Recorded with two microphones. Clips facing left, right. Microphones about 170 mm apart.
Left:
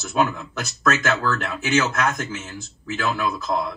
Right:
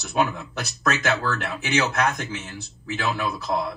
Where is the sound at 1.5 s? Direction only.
35° right (ahead or behind).